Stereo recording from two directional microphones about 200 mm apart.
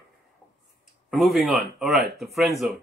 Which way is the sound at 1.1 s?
Centre (ahead or behind).